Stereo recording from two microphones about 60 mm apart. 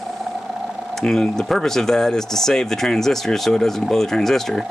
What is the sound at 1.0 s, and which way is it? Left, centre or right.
Speech, centre.